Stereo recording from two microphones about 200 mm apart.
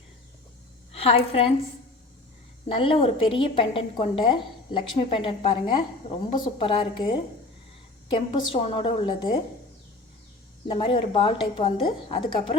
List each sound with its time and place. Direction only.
0.9 s a woman's voice: 30° left (ahead or behind)
2.6 s a woman's voice: 25° left (ahead or behind)
10.7 s a woman's voice: 30° left (ahead or behind)